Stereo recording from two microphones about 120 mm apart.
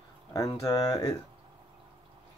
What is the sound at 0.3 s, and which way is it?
Speech, 30° left (ahead or behind).